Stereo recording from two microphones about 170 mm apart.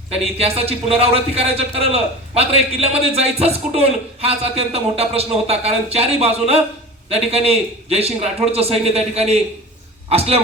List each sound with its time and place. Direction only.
0.1 s a man's voice: 35° right (ahead or behind)